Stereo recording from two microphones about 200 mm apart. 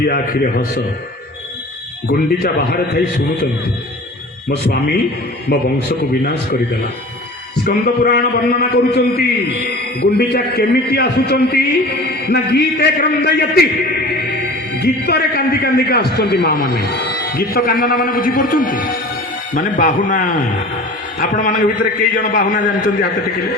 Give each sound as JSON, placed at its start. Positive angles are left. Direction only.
{"t": 0.0, "sound": "a man's voice", "side_deg": 45}
{"t": 2.0, "sound": "a man's voice", "side_deg": 50}
{"t": 4.4, "sound": "a man's voice", "side_deg": 55}
{"t": 14.8, "sound": "a man's voice", "side_deg": 55}